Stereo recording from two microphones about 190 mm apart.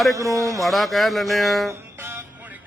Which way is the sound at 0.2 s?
15° right (ahead or behind).